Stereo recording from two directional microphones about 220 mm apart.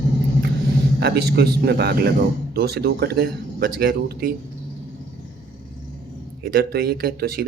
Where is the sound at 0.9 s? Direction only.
45° right (ahead or behind).